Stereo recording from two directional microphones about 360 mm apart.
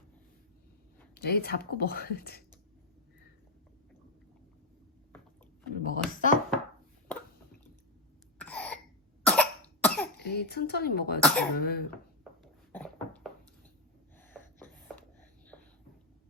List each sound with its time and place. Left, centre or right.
1.1 s speech: left
5.8 s speech: left
8.4 s cough: centre
10.2 s speech: left
11.2 s speech: centre
11.5 s speech: left
12.7 s a sound: centre
14.2 s gasp: centre